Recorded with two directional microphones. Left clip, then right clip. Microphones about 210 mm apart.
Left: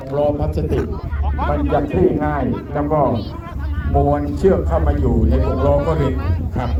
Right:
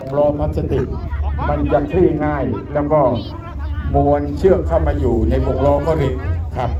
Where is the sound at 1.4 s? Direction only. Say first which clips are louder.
Even; 45° left (ahead or behind).